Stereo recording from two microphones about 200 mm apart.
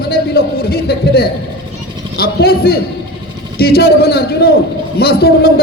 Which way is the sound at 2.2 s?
50° left (ahead or behind).